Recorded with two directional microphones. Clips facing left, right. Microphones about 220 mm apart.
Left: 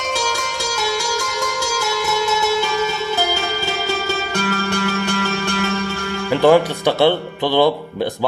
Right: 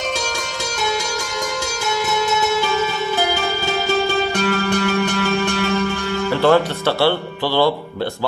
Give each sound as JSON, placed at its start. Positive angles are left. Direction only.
{"t": 6.3, "sound": "speech", "side_deg": 15}